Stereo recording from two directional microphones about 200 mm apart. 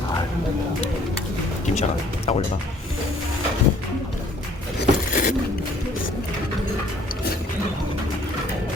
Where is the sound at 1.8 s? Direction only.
30° left (ahead or behind).